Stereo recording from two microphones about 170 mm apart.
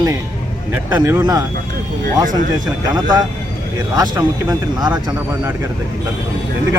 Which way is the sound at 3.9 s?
25° right (ahead or behind).